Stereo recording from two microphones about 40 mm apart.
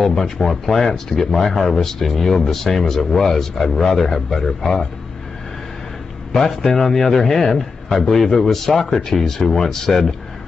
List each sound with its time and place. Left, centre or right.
0.0 s speech: centre
6.3 s speech: centre